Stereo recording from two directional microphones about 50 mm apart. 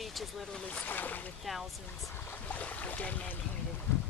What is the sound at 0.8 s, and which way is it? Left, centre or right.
Speech, left.